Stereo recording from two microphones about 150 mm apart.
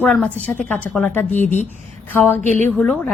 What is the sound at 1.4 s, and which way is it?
Speech, 50° left (ahead or behind).